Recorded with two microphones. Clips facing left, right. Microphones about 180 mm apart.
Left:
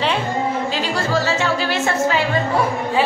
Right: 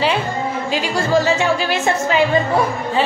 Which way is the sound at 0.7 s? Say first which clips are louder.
Right 2 dB; 15° right (ahead or behind).